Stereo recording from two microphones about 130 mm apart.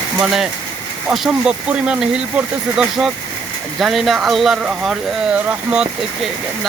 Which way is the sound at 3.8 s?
Centre (ahead or behind).